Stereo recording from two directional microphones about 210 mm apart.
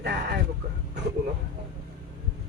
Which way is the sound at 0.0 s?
55° right (ahead or behind).